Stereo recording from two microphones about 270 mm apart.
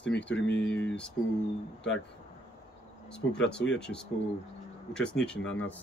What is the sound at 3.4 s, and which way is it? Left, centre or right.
Speech, centre.